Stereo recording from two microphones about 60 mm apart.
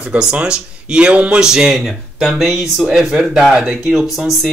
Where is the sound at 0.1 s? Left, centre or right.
Centre.